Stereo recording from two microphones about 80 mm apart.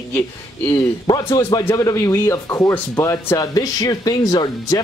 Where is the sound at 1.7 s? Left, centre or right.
Left.